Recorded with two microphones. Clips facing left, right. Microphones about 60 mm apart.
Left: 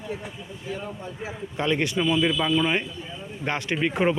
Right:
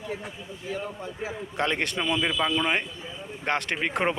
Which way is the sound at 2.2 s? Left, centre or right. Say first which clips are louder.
Left 4 dB; right.